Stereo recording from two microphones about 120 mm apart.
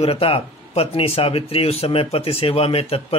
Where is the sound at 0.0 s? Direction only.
50° left (ahead or behind).